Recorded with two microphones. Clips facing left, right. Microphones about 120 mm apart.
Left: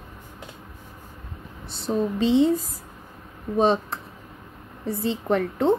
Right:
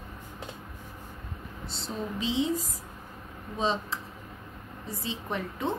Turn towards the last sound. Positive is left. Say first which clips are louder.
# left 11 dB
turn(degrees=65)  # may be behind; listen again after turning